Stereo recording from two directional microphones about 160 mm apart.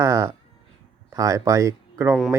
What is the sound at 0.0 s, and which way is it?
Speech, 20° right (ahead or behind).